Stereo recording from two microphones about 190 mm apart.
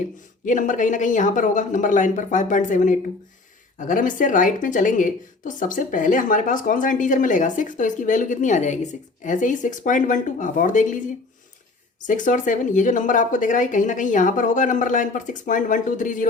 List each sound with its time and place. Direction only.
0.4 s a woman's voice: 40° left (ahead or behind)
12.0 s a woman's voice: 40° left (ahead or behind)